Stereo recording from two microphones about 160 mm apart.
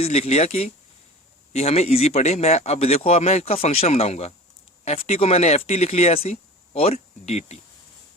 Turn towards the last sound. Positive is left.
turn(degrees=40)  # may be behind; listen again after turning